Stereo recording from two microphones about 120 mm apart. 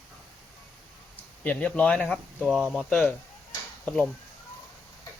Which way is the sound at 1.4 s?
10° left (ahead or behind).